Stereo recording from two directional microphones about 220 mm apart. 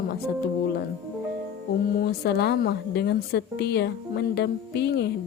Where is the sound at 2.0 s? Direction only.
45° left (ahead or behind).